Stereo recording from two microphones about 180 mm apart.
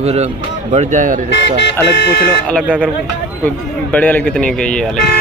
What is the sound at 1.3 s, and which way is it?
Speech, 85° left.